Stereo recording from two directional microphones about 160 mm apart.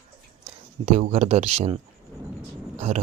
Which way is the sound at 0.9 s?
45° right (ahead or behind).